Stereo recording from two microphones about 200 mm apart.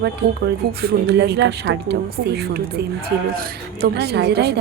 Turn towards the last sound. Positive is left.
turn(degrees=-55)  # may be behind; listen again after turning